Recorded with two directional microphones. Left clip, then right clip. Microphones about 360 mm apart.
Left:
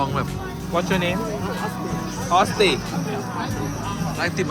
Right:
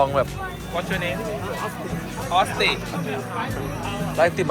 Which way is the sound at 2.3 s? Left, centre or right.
Left.